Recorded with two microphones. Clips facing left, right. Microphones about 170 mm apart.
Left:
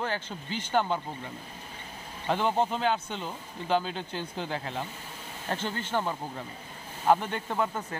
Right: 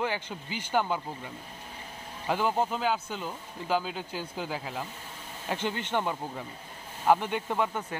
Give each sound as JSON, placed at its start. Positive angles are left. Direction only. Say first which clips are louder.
{"t": 0.0, "sound": "speech", "louder": "right 1 dB", "side_deg": -10}
{"t": 2.2, "sound": "speech", "louder": "left 1 dB", "side_deg": -5}
{"t": 5.5, "sound": "speech", "louder": "right 1 dB", "side_deg": -15}